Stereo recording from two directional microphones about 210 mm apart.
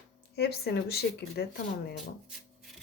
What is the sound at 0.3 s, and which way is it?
Speech, 50° left (ahead or behind).